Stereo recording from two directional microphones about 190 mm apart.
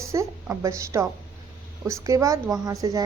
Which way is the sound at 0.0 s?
15° right (ahead or behind).